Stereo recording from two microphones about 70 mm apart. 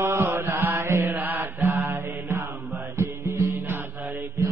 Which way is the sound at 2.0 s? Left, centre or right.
Right.